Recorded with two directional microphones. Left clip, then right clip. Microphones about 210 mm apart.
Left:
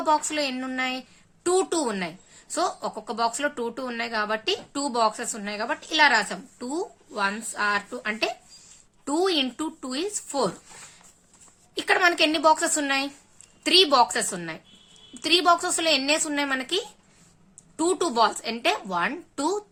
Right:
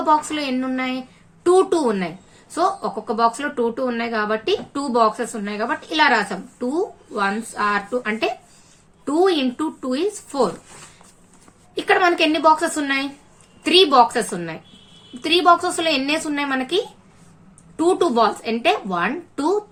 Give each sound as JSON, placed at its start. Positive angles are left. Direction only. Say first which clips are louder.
{"t": 0.0, "sound": "a woman's voice", "louder": "right 5 dB", "side_deg": 35}
{"t": 11.7, "sound": "a woman's voice", "louder": "right 4 dB", "side_deg": 35}